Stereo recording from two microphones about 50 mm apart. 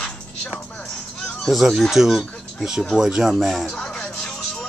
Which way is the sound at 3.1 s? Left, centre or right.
Centre.